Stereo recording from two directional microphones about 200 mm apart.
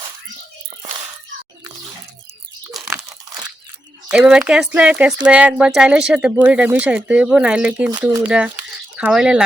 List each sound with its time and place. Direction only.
2.8 s crunch: 10° right (ahead or behind)
4.1 s speech: 5° right (ahead or behind)